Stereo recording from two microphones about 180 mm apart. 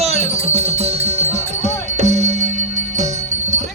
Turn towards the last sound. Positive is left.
turn(degrees=-40)  # may be behind; listen again after turning